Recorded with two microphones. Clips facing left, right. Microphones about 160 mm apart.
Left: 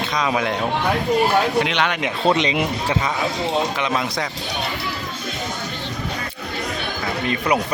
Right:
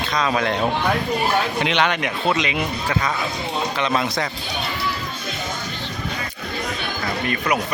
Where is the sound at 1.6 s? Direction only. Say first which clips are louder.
Even; centre (ahead or behind).